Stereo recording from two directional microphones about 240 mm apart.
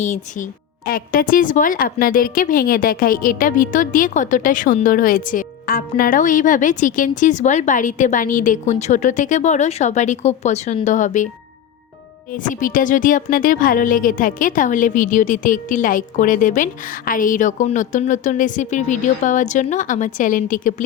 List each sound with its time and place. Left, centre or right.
0.0 s a woman's voice: left
12.3 s a woman's voice: left